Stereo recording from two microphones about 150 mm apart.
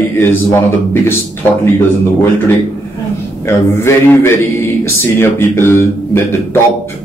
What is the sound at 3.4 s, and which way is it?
A man's voice, 15° left (ahead or behind).